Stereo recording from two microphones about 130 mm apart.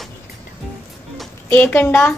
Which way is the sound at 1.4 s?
15° left (ahead or behind).